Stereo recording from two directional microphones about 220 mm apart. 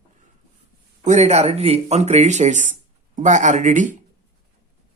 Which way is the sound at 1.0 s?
30° right (ahead or behind).